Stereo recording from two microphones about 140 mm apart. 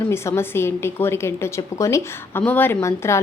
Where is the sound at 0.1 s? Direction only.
15° left (ahead or behind).